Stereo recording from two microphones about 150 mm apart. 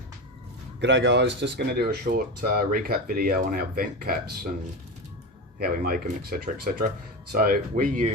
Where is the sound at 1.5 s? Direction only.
90° right.